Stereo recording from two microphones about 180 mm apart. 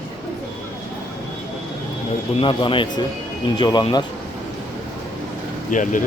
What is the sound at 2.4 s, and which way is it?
A man's voice, 30° left (ahead or behind).